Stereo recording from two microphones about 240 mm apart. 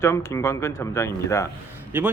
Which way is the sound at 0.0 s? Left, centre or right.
Centre.